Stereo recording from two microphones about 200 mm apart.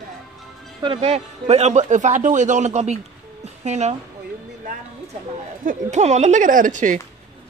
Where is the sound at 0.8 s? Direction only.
30° right (ahead or behind).